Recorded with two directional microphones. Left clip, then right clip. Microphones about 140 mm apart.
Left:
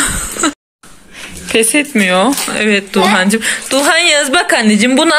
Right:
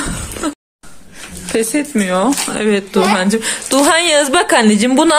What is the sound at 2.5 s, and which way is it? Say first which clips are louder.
A woman's voice: left 3 dB; 25° right (ahead or behind).